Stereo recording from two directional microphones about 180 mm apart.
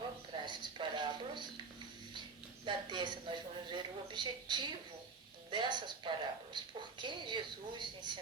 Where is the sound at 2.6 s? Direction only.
25° right (ahead or behind).